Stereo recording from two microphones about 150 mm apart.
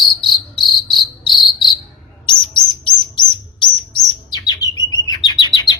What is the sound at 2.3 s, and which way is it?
Bird, 30° left (ahead or behind).